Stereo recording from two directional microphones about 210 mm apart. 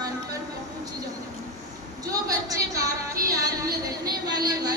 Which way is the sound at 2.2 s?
15° right (ahead or behind).